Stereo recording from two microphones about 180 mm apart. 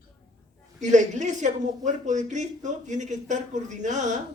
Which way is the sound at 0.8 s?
40° right (ahead or behind).